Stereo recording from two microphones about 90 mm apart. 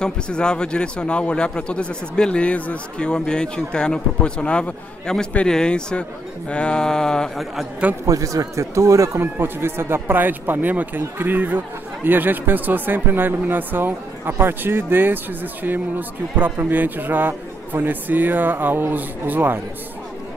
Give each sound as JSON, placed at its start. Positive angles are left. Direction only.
{"t": 0.0, "sound": "a man's voice", "side_deg": 10}
{"t": 8.0, "sound": "speech", "side_deg": -40}